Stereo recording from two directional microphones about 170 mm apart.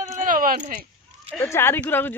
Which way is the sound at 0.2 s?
55° right (ahead or behind).